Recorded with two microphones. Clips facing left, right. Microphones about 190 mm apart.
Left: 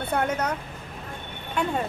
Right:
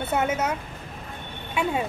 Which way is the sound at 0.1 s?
5° right (ahead or behind).